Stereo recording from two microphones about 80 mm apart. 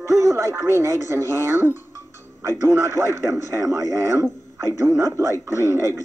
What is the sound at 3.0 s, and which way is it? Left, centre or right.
Speech, right.